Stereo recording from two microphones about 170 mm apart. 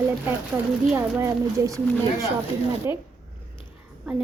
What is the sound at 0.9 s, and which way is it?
Speech, 15° right (ahead or behind).